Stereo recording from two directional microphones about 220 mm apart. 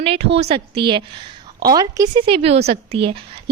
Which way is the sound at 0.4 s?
25° right (ahead or behind).